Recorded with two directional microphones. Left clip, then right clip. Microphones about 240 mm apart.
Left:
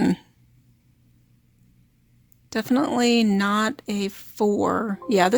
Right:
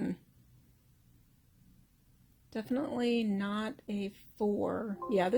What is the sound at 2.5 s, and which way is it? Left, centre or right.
Speech, left.